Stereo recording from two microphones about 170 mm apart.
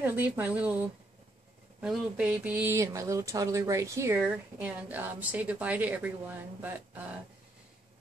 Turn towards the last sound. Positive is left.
turn(degrees=-10)  # may be behind; listen again after turning